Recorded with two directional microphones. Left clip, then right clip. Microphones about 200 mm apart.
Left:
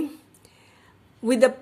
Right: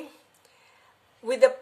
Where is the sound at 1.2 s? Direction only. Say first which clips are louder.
Left 1 dB; 35° left (ahead or behind).